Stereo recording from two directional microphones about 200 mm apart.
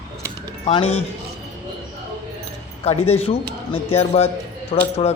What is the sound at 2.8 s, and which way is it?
A man's voice, 30° left (ahead or behind).